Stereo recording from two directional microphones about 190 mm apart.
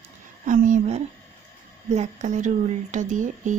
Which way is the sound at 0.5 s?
40° right (ahead or behind).